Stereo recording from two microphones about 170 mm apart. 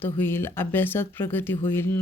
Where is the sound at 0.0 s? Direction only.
10° left (ahead or behind).